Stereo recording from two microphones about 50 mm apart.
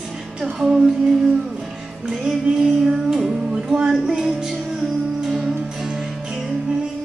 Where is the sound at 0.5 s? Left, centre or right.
Centre.